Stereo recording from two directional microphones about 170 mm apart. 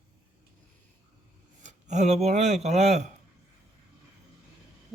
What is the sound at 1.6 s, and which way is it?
Speech, 45° right (ahead or behind).